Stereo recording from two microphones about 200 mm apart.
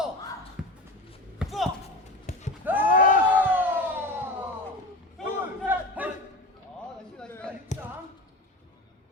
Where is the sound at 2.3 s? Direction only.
35° left (ahead or behind).